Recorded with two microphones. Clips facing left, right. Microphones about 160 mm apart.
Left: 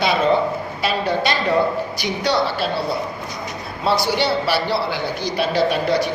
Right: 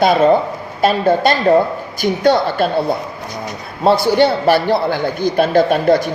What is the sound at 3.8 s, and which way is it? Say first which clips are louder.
A man's voice: right 7 dB; 50° right (ahead or behind).